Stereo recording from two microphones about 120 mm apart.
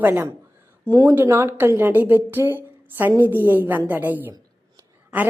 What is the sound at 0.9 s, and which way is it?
A woman's voice, 30° right (ahead or behind).